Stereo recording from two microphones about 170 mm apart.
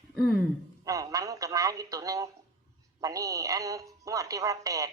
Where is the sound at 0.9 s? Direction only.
20° right (ahead or behind).